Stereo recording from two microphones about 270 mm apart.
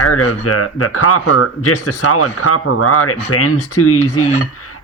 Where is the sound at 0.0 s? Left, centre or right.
Left.